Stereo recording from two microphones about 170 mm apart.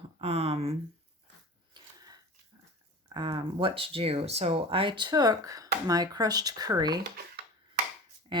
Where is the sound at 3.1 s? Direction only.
25° right (ahead or behind).